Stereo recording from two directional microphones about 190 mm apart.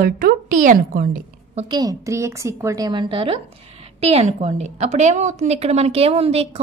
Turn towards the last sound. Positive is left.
turn(degrees=-30)  # may be behind; listen again after turning